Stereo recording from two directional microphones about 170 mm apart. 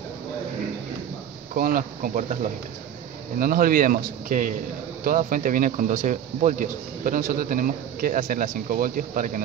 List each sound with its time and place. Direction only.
1.5 s speech: 55° right (ahead or behind)
3.3 s speech: 55° right (ahead or behind)